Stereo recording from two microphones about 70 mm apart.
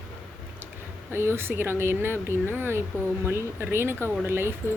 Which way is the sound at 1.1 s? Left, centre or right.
Right.